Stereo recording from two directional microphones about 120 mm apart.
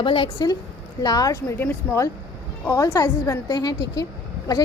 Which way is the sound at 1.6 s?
15° left (ahead or behind).